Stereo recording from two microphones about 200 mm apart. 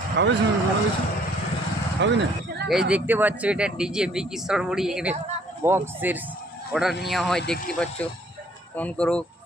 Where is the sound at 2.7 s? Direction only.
5° right (ahead or behind).